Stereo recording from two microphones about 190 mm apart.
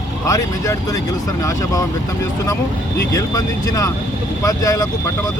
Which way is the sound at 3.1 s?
15° left (ahead or behind).